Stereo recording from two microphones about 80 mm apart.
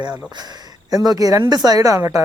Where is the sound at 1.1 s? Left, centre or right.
Right.